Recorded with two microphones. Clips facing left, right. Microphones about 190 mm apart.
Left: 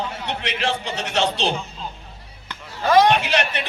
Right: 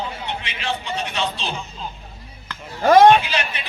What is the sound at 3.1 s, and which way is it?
Speech, 70° left (ahead or behind).